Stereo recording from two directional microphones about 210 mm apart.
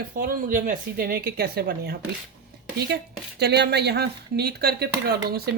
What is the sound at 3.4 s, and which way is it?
Speech, 55° right (ahead or behind).